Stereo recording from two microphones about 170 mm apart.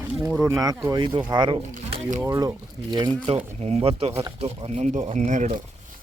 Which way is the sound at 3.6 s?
40° right (ahead or behind).